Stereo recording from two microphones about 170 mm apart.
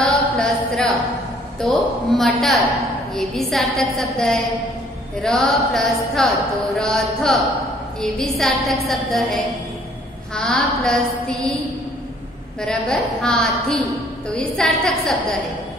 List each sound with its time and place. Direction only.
0.0 s a sound: 5° left (ahead or behind)
1.6 s a woman's voice: centre (ahead or behind)
12.5 s a woman's voice: 5° left (ahead or behind)